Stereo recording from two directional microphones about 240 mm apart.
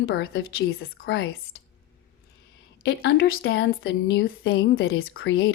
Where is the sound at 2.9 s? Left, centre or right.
Left.